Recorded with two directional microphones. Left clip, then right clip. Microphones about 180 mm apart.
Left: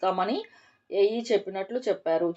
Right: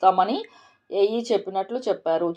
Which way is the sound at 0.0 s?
30° right (ahead or behind).